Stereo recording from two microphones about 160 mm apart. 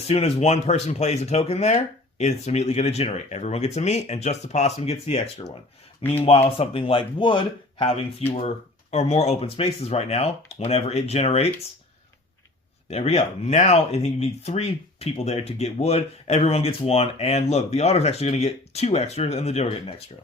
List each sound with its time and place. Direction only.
0.1 s speech: 40° left (ahead or behind)
12.9 s speech: 40° left (ahead or behind)